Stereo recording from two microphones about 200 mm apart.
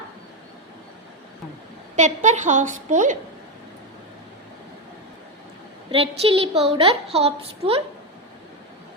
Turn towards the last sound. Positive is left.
turn(degrees=-30)  # may be behind; listen again after turning